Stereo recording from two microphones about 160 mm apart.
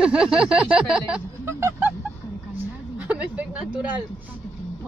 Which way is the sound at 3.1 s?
10° right (ahead or behind).